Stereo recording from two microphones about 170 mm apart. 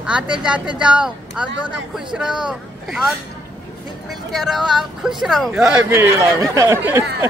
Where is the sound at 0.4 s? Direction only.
5° right (ahead or behind).